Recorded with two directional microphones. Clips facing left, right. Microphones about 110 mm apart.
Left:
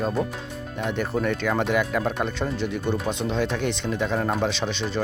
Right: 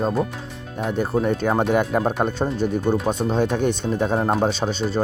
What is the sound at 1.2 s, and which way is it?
Speech, 40° right (ahead or behind).